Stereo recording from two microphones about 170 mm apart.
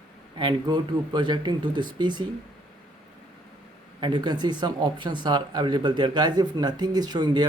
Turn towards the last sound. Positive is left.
turn(degrees=-25)  # may be behind; listen again after turning